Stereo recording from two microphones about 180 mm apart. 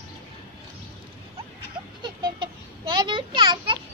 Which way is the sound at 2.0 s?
25° right (ahead or behind).